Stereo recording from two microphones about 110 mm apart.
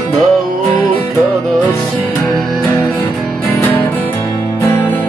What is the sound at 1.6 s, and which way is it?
Music, 15° left (ahead or behind).